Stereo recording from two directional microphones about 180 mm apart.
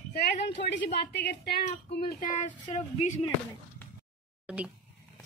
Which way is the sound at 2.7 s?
40° left (ahead or behind).